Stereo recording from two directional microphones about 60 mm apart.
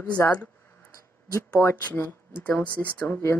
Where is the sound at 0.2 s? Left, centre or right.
Left.